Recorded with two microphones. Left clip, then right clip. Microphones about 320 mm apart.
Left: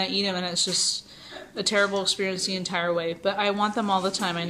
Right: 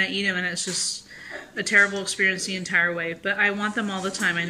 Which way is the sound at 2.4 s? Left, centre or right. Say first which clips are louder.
Right 4 dB; centre.